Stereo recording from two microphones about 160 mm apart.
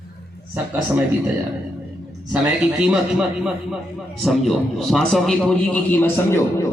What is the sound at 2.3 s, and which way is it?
A man's voice, 5° right (ahead or behind).